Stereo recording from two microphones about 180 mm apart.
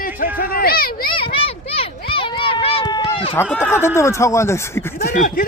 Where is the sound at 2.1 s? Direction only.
30° left (ahead or behind).